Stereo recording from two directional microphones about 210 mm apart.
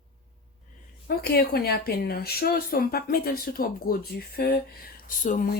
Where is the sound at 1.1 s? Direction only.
50° left (ahead or behind).